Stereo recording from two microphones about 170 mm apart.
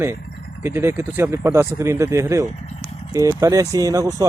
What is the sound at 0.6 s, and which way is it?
Speech, 15° right (ahead or behind).